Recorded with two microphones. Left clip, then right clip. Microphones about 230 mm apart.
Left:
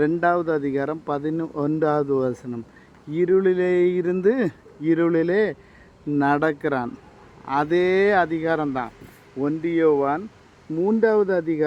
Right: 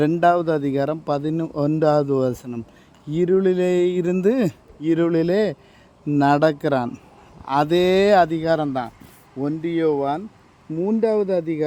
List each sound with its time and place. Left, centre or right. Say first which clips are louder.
0.0 s speech: right 3 dB; right
10.8 s speech: left 1 dB; right